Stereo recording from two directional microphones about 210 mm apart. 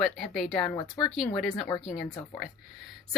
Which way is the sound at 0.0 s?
Centre (ahead or behind).